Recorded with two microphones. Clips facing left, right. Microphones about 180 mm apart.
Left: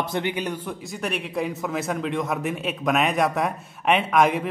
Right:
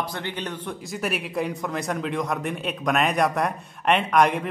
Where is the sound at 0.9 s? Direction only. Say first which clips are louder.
Right 1 dB; 5° right (ahead or behind).